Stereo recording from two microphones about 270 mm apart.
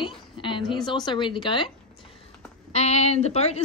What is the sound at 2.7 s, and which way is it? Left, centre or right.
Speech, left.